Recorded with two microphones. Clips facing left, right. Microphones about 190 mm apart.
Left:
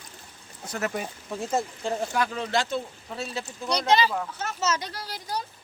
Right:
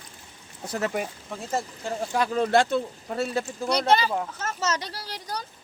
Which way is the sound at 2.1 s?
30° right (ahead or behind).